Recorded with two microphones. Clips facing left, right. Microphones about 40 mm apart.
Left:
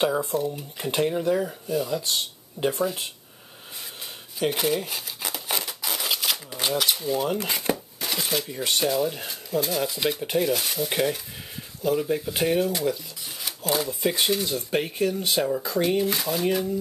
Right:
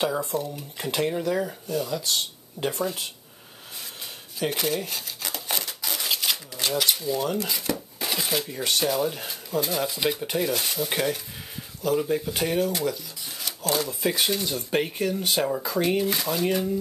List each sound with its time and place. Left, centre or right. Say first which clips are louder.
0.3 s speech: left 3 dB; centre
4.4 s a sound: left 2 dB; centre
6.5 s a sound: left 2 dB; centre
6.8 s speech: even; centre
7.1 s speech: left 1 dB; centre
7.3 s speech: left 2 dB; left
7.7 s speech: right 1 dB; centre